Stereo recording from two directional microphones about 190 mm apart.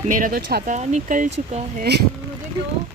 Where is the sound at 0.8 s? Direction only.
40° right (ahead or behind).